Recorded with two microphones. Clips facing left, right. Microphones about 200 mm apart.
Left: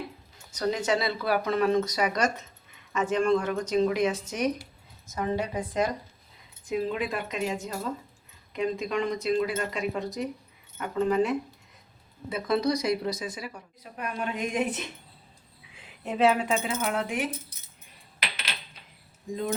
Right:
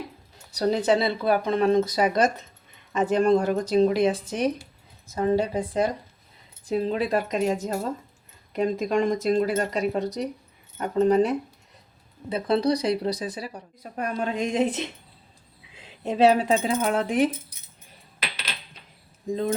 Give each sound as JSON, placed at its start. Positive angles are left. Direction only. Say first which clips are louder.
{"t": 0.5, "sound": "speech", "louder": "right 5 dB", "side_deg": -35}
{"t": 15.7, "sound": "a sound", "louder": "right 5 dB", "side_deg": -25}
{"t": 16.2, "sound": "speech", "louder": "right 5 dB", "side_deg": -35}